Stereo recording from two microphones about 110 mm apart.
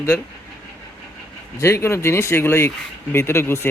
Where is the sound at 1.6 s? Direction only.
25° left (ahead or behind).